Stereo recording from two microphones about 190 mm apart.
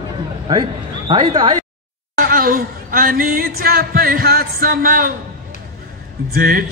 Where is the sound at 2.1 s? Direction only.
50° right (ahead or behind).